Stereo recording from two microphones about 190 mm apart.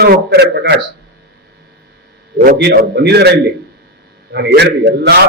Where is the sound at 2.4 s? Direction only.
55° right (ahead or behind).